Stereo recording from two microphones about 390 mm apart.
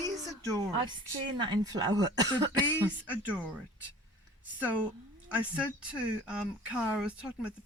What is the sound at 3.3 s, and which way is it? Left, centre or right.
Speech, centre.